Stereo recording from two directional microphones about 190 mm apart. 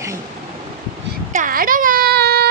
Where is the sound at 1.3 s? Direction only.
45° right (ahead or behind).